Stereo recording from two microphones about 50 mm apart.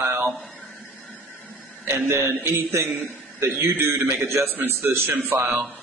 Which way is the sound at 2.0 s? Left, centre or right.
Right.